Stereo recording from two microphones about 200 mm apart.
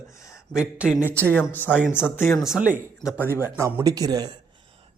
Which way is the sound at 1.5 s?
10° left (ahead or behind).